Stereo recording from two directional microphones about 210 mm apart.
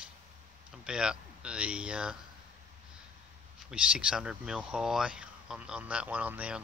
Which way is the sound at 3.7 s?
5° right (ahead or behind).